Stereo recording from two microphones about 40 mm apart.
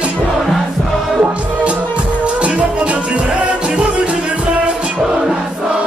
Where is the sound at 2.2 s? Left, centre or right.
Right.